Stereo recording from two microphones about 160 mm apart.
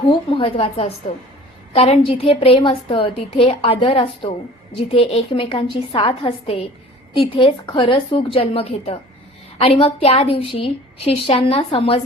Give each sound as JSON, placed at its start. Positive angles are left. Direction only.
{"t": 0.1, "sound": "a woman's voice", "side_deg": 35}